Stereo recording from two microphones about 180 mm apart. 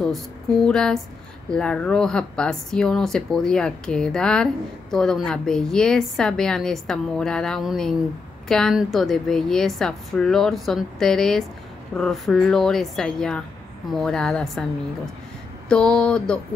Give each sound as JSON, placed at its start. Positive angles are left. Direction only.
{"t": 0.0, "sound": "speech", "side_deg": 0}
{"t": 15.7, "sound": "speech", "side_deg": 5}